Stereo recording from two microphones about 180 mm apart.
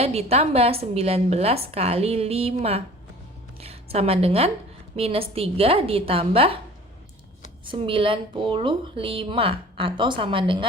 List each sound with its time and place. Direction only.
0.0 s a woman's voice: 35° right (ahead or behind)
7.6 s a woman's voice: 30° right (ahead or behind)